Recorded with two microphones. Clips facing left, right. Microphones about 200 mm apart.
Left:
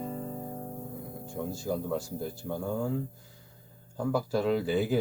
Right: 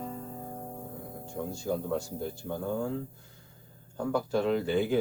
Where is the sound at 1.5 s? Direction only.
5° left (ahead or behind).